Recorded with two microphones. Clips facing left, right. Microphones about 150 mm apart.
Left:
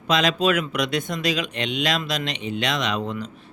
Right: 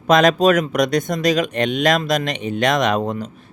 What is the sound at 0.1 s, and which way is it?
Speech, 50° right (ahead or behind).